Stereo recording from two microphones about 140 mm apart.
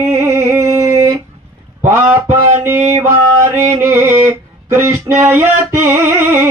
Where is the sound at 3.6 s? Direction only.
15° right (ahead or behind).